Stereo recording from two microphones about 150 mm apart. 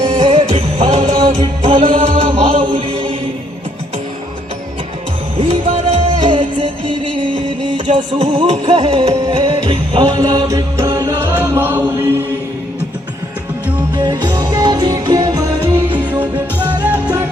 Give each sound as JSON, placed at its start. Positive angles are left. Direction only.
{"t": 0.0, "sound": "music", "side_deg": -35}
{"t": 5.4, "sound": "music", "side_deg": -35}
{"t": 7.9, "sound": "music", "side_deg": -35}
{"t": 11.3, "sound": "chant", "side_deg": -15}
{"t": 13.9, "sound": "music", "side_deg": -25}
{"t": 15.9, "sound": "music", "side_deg": -10}